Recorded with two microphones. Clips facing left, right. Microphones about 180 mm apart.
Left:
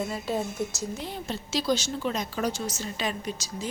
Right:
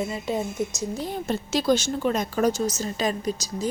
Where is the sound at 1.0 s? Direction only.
45° right (ahead or behind).